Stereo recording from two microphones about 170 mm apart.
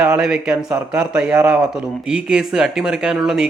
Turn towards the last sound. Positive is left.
turn(degrees=-5)  # may be behind; listen again after turning